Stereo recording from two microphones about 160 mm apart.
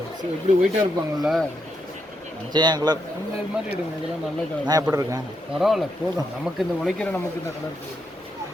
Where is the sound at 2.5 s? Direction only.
25° right (ahead or behind).